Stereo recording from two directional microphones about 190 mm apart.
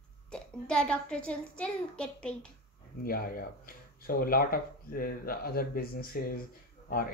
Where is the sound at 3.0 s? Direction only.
50° left (ahead or behind).